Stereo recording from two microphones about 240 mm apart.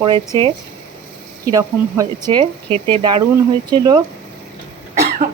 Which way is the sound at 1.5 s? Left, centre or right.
Centre.